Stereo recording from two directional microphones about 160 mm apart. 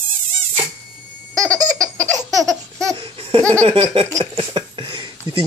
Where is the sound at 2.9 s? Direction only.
35° right (ahead or behind).